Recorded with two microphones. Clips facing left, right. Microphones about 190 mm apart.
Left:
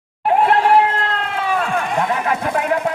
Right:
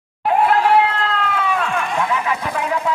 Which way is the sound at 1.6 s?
45° left (ahead or behind).